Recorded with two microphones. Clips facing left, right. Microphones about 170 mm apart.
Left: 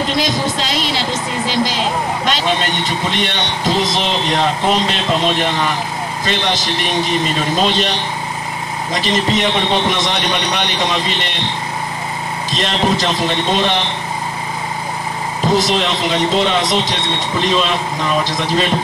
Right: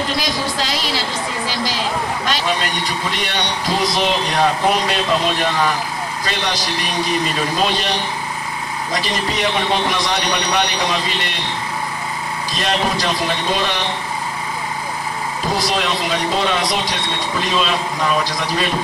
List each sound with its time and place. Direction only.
0.1 s a man's voice: 20° left (ahead or behind)
12.5 s a man's voice: 20° left (ahead or behind)
15.5 s a man's voice: 20° left (ahead or behind)